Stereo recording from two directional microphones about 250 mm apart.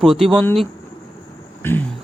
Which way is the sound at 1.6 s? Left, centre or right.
Centre.